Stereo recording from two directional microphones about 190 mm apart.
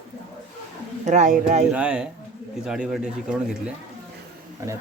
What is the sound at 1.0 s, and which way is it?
Speech, 40° right (ahead or behind).